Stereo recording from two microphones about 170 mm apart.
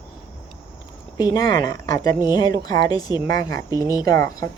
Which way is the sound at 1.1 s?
25° left (ahead or behind).